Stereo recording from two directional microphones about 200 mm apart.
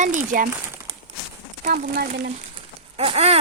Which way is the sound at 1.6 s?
45° right (ahead or behind).